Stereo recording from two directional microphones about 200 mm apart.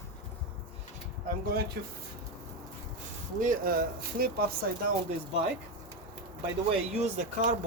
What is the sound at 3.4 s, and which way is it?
Speech, 45° right (ahead or behind).